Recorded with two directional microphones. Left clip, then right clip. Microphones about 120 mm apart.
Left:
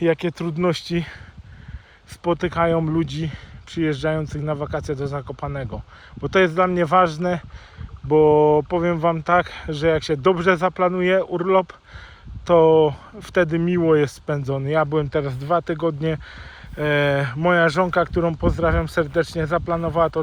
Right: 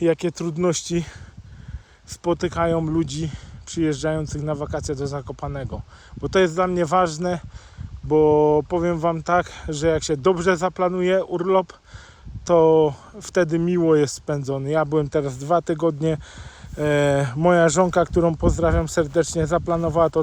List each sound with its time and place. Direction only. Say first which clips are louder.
0.0 s speech: even; 35° right (ahead or behind); by 20.2 s 55° right (ahead or behind)